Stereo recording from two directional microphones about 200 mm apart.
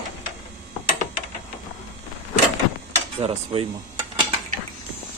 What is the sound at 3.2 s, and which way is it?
Speech, 30° right (ahead or behind).